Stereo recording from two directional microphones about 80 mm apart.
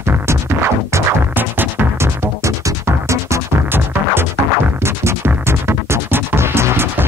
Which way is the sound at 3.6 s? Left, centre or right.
Right.